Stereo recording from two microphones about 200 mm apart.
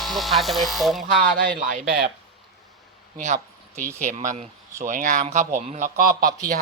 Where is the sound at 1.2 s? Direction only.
40° right (ahead or behind).